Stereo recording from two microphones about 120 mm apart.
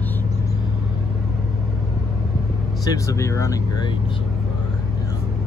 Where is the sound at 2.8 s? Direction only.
25° left (ahead or behind).